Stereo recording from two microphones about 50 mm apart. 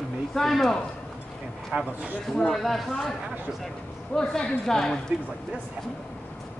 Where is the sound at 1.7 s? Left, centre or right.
Right.